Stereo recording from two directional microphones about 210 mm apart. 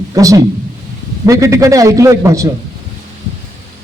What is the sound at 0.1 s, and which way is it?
A man's voice, 15° right (ahead or behind).